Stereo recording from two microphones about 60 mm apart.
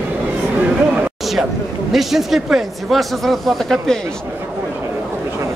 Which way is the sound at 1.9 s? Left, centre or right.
Centre.